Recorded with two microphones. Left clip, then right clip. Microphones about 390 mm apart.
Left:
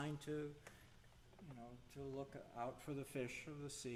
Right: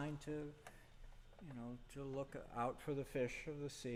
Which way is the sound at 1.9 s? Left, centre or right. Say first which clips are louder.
Right 3 dB; right.